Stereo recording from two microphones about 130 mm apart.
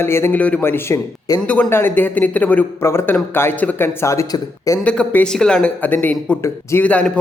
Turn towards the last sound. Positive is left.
turn(degrees=10)  # may be behind; listen again after turning